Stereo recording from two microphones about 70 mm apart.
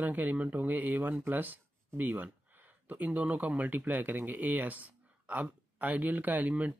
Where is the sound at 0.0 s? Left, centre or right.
Right.